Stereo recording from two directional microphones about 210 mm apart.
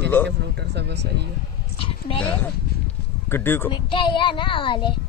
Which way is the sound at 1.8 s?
25° left (ahead or behind).